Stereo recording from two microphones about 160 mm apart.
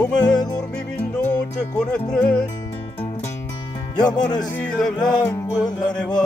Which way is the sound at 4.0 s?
25° left (ahead or behind).